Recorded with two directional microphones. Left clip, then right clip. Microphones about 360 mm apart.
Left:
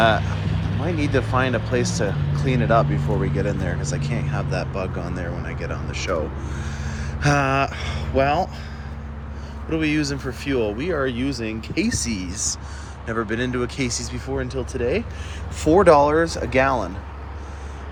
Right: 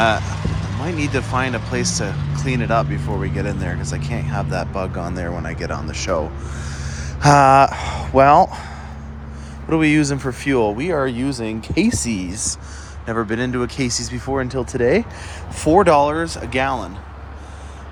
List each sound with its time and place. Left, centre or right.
0.0 s speech: centre
9.7 s speech: centre
11.3 s speech: right
11.7 s speech: centre
14.6 s speech: right
15.6 s speech: centre